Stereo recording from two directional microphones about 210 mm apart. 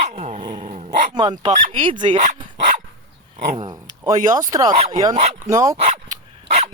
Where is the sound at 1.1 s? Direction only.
20° right (ahead or behind).